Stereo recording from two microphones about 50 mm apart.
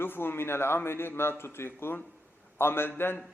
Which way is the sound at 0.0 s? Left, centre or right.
Left.